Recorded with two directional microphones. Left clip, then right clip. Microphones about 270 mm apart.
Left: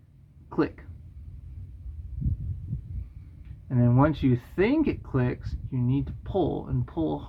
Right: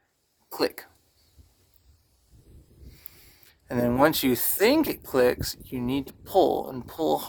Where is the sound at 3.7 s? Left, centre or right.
Right.